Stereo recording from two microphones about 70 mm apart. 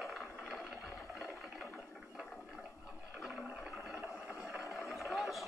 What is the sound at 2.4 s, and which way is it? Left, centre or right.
Toilet flush, centre.